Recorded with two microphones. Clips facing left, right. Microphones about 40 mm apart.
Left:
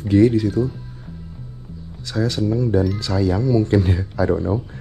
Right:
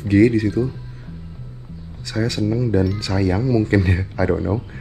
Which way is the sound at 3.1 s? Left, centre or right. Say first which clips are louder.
Even; right.